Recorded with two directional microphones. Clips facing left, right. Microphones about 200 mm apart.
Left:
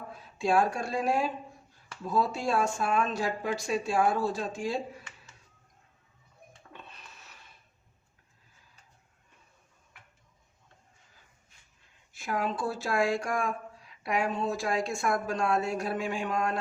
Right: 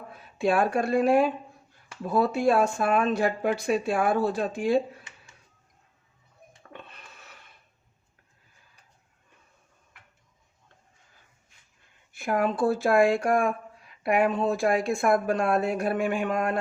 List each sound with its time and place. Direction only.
0.1 s speech: 60° right (ahead or behind)
6.7 s a sound: 55° right (ahead or behind)
12.1 s speech: 55° right (ahead or behind)